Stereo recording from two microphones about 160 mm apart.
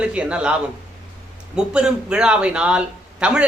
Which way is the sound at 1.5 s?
5° right (ahead or behind).